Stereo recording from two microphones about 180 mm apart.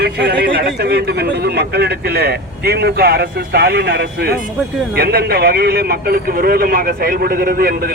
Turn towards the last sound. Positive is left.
turn(degrees=-55)  # may be behind; listen again after turning